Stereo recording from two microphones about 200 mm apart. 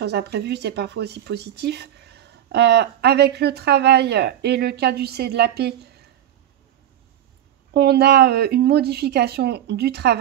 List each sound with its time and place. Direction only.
0.0 s speech: 55° right (ahead or behind)
7.7 s speech: 55° right (ahead or behind)